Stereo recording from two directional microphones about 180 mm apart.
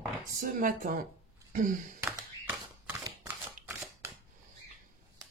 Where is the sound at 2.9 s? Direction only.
20° right (ahead or behind).